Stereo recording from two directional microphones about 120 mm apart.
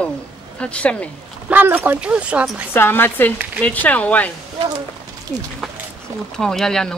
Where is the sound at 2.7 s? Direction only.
20° left (ahead or behind).